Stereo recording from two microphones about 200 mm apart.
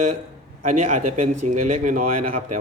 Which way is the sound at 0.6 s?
35° right (ahead or behind).